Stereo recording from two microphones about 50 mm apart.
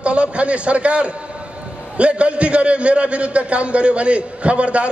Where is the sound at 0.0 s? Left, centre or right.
Right.